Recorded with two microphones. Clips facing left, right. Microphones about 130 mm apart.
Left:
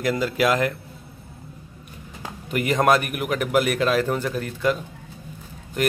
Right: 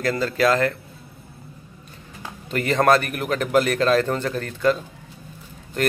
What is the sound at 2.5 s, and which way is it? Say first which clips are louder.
Speech: right 1 dB; 10° left (ahead or behind).